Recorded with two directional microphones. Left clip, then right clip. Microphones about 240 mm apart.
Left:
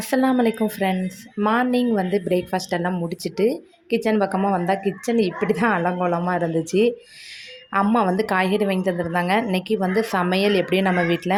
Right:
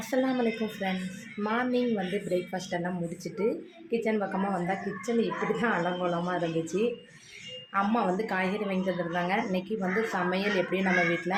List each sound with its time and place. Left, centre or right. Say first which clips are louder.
0.1 s a woman's voice: left 8 dB; left